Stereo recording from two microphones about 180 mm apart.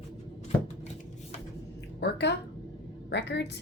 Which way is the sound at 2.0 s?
70° left (ahead or behind).